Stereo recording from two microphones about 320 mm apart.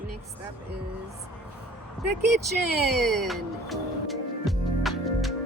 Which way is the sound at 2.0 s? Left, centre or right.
Centre.